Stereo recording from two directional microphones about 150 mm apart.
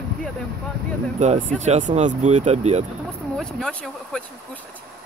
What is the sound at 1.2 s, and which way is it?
Speech, 50° right (ahead or behind).